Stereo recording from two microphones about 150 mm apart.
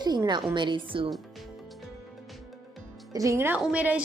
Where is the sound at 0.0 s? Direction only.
30° right (ahead or behind).